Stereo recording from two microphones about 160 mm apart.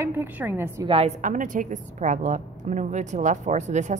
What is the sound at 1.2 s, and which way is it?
A woman's voice, 55° right (ahead or behind).